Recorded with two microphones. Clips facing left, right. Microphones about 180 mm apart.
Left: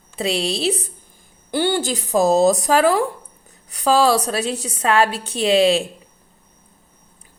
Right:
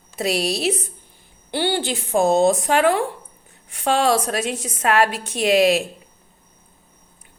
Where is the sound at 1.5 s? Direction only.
45° left (ahead or behind).